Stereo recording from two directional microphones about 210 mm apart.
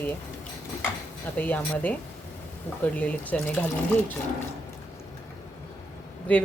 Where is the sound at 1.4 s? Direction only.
10° left (ahead or behind).